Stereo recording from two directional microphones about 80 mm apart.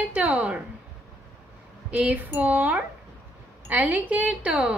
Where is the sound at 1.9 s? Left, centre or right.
Centre.